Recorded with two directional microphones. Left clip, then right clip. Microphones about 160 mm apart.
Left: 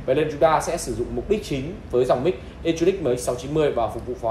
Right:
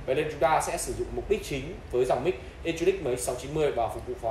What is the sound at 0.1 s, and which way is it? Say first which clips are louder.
A man's voice: left 6 dB; centre (ahead or behind).